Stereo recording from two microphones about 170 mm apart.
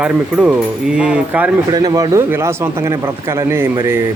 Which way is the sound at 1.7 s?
20° right (ahead or behind).